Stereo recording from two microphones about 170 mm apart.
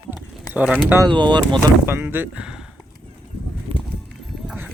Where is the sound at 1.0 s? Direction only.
25° right (ahead or behind).